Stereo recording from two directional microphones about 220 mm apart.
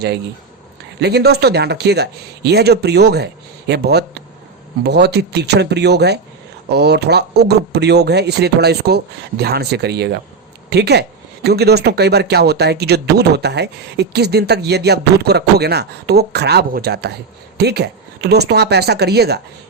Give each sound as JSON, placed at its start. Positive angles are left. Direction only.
{"t": 0.9, "sound": "speech", "side_deg": -50}